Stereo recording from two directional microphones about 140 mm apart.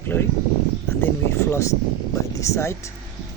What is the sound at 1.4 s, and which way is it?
Speech, 20° left (ahead or behind).